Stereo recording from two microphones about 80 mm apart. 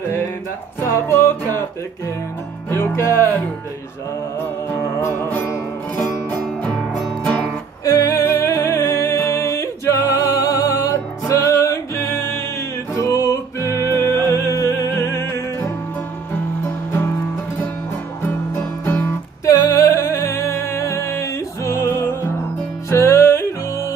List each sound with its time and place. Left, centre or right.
1.0 s music: left
2.7 s music: left
5.0 s music: left
7.8 s music: left
18.9 s music: left
19.4 s music: left